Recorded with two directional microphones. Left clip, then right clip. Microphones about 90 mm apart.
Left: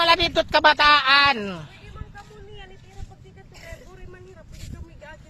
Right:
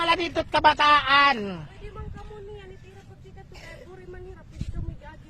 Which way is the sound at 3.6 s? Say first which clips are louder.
Left 1 dB; centre (ahead or behind).